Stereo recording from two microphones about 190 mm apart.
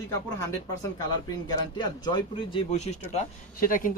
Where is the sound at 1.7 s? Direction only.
25° left (ahead or behind).